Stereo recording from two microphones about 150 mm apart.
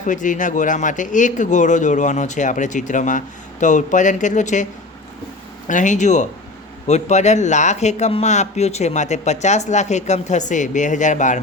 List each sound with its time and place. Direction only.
0.0 s speech: 60° left (ahead or behind)
5.6 s speech: 55° left (ahead or behind)